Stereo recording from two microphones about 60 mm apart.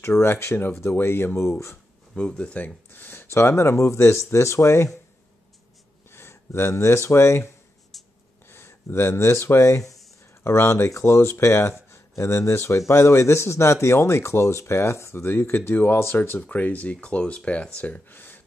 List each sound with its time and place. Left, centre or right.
0.0 s speech: left
2.1 s speech: centre
2.9 s speech: left
3.3 s speech: left
6.0 s a sound: left
6.7 s speech: left
7.9 s a sound: centre
8.5 s speech: left
10.4 s speech: left
16.3 s speech: left